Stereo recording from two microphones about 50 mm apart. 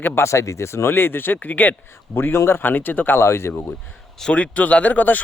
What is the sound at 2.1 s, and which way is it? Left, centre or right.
Speech, left.